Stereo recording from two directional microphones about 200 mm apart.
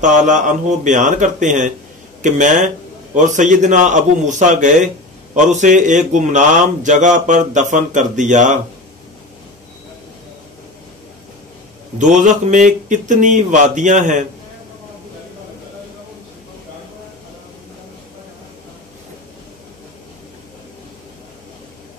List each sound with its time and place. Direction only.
0.0 s speech: 40° right (ahead or behind)
12.0 s speech: 40° right (ahead or behind)